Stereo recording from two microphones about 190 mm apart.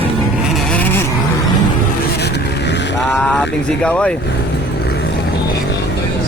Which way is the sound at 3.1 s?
5° left (ahead or behind).